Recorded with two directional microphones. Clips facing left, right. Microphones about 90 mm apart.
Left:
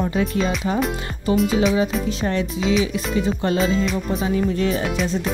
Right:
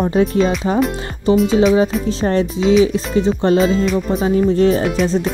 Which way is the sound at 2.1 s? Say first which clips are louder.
Right 6 dB; 35° right (ahead or behind).